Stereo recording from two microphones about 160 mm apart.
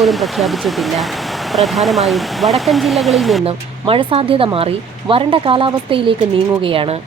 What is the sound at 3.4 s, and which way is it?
Speech, 35° right (ahead or behind).